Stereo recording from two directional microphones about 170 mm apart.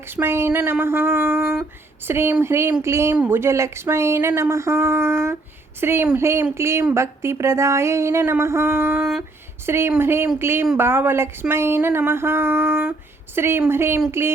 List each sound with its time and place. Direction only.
0.1 s a woman's voice: 15° right (ahead or behind)